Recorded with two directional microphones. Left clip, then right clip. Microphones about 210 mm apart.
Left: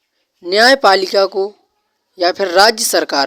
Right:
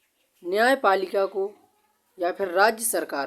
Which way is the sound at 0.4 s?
30° left (ahead or behind).